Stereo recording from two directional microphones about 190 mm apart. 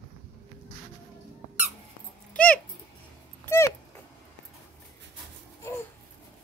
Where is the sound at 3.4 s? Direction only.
15° left (ahead or behind).